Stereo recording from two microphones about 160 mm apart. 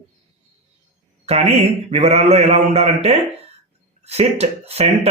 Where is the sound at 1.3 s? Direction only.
40° right (ahead or behind).